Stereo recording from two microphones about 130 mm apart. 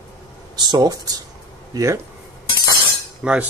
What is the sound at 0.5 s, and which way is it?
Speech, 35° right (ahead or behind).